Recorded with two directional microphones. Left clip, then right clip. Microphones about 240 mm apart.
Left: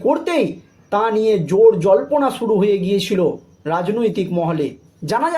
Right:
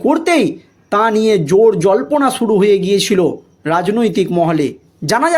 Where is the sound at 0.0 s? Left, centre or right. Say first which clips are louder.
Right 4 dB; right.